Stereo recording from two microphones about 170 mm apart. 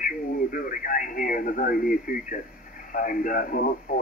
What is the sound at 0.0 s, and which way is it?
Radio, 55° left (ahead or behind).